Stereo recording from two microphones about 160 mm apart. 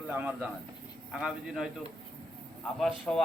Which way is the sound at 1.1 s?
5° right (ahead or behind).